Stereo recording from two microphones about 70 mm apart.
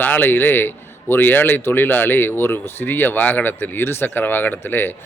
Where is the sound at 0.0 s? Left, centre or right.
Left.